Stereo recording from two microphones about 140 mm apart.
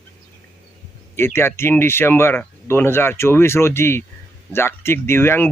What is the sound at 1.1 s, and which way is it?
Speech, 15° left (ahead or behind).